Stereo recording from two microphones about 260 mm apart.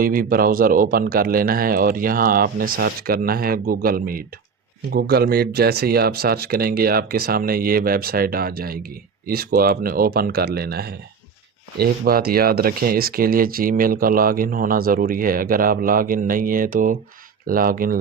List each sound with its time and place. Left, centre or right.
0.0 s speech: right